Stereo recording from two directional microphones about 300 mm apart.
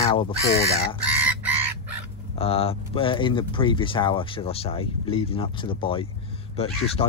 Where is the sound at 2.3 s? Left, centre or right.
Centre.